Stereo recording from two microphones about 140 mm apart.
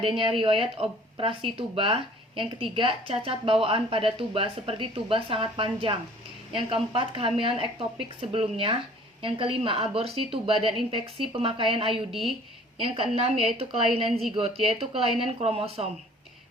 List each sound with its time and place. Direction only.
0.0 s speech: 40° right (ahead or behind)
12.1 s a woman's voice: centre (ahead or behind)
12.7 s speech: 40° right (ahead or behind)